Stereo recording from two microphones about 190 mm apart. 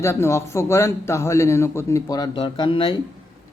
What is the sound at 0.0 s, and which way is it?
Speech, 15° left (ahead or behind).